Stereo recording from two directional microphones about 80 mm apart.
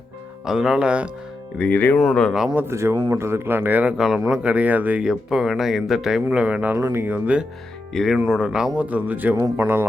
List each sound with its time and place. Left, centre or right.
0.4 s speech: centre
1.5 s speech: left
2.3 s speech: centre
2.6 s a man's voice: right
3.9 s speech: centre
5.0 s speech: centre
6.3 s a man's voice: centre
7.9 s a man's voice: centre; by 9.8 s right